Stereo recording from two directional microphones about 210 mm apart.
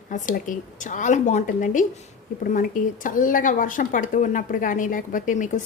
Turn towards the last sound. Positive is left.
turn(degrees=35)  # may be behind; listen again after turning